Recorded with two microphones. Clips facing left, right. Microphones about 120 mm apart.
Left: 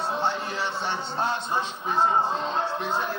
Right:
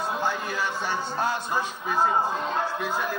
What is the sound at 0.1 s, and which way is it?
Speech, 25° left (ahead or behind).